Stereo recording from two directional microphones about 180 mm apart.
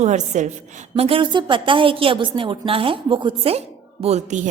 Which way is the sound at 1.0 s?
30° right (ahead or behind).